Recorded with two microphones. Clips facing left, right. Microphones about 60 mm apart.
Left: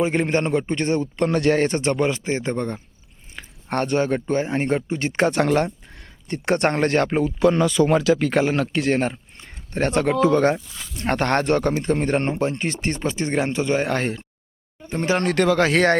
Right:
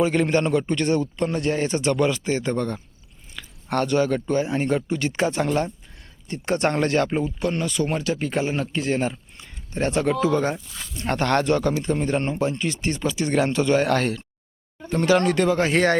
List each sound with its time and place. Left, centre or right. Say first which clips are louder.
0.0 s speech: even; left
1.1 s speech: left 3 dB; left
1.4 s speech: left 7 dB; left
1.6 s speech: left 1 dB; left
5.1 s speech: left 5 dB; left
8.1 s speech: left 5 dB; left
10.9 s speech: left 1 dB; left
13.3 s speech: right 3 dB; centre
15.1 s speech: right 3 dB; left
15.4 s speech: left 2 dB; left